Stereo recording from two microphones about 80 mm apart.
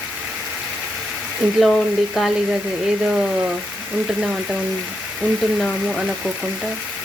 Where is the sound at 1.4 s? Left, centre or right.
Centre.